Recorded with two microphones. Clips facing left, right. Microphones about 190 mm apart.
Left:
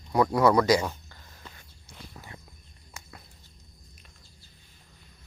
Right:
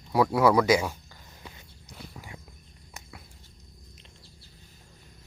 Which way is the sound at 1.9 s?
10° right (ahead or behind).